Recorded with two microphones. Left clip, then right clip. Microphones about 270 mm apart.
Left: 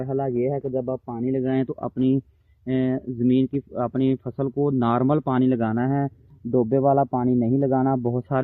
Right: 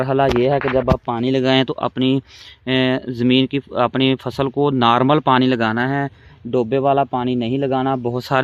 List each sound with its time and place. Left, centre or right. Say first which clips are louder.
0.0 s speech: right 9 dB; right; by 8.4 s centre